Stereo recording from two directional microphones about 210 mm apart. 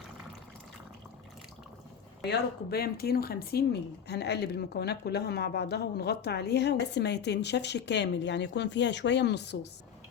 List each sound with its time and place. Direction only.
2.2 s speech: 50° left (ahead or behind)